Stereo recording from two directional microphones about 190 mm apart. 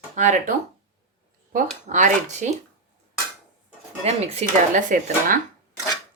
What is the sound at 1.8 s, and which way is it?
Speech, 40° right (ahead or behind).